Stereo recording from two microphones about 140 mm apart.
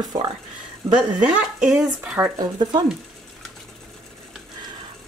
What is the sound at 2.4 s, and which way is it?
Speech, 30° right (ahead or behind).